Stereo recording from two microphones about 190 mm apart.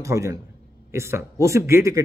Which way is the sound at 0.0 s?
15° right (ahead or behind).